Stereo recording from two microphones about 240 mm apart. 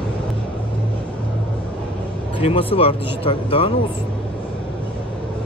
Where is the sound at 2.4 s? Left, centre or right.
Left.